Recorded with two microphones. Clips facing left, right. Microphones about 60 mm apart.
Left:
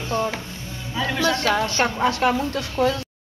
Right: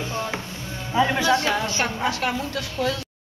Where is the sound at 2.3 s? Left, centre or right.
Left.